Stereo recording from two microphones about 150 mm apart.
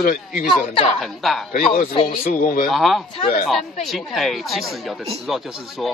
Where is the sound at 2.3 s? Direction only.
65° left (ahead or behind).